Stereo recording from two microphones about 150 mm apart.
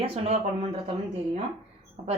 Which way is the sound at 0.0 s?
40° right (ahead or behind).